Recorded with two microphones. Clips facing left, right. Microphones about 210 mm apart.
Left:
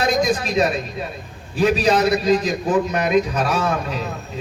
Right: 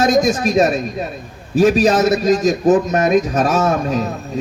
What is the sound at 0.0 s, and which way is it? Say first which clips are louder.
A man's voice: right 5 dB; 45° right (ahead or behind).